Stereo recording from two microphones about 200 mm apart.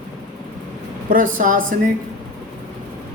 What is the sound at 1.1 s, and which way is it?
Speech, 40° right (ahead or behind).